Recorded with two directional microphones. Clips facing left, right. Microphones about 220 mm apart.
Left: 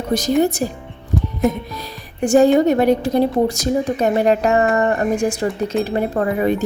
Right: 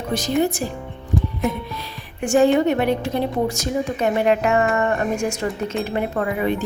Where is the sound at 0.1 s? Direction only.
40° left (ahead or behind).